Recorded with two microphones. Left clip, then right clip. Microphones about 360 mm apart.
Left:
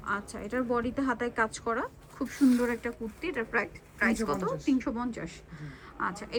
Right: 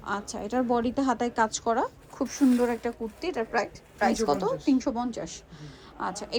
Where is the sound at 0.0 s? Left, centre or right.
Centre.